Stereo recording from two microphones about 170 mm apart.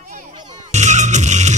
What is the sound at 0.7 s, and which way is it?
Music, 45° right (ahead or behind).